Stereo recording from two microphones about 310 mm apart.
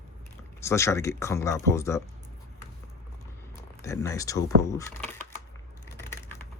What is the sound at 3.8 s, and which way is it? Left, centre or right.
Speech, centre.